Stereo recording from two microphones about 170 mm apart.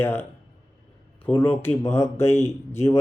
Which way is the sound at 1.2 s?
10° left (ahead or behind).